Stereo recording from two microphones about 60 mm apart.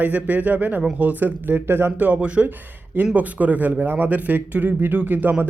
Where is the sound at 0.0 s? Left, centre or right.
Right.